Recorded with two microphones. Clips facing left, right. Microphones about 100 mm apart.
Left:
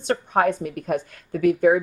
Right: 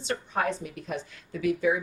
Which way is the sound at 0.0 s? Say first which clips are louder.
Left 8 dB; 55° left (ahead or behind).